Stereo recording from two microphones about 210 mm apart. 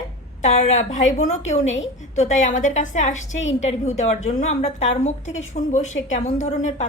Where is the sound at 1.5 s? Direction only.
65° left (ahead or behind).